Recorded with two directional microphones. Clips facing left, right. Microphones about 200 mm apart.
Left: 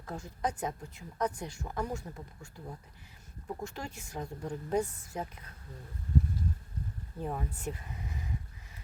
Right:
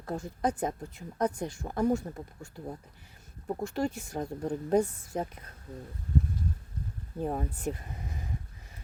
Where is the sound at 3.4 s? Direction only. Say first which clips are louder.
Right 9 dB; 45° right (ahead or behind).